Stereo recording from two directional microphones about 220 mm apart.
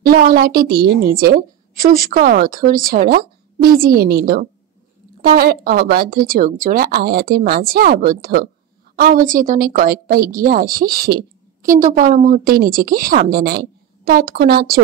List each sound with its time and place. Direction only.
0.1 s a woman's voice: 40° right (ahead or behind)